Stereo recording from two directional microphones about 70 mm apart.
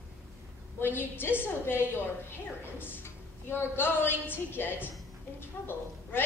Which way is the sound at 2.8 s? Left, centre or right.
Left.